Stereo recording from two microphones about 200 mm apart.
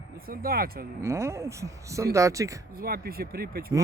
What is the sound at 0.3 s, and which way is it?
Speech, 50° right (ahead or behind).